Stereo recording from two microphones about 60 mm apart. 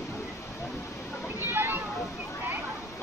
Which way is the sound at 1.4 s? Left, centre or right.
Right.